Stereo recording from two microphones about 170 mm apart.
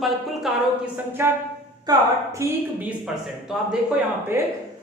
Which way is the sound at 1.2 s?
15° right (ahead or behind).